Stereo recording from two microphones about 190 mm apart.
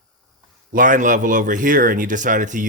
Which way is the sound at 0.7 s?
45° right (ahead or behind).